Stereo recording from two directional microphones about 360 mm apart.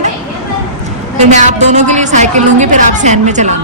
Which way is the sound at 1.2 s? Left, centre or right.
Centre.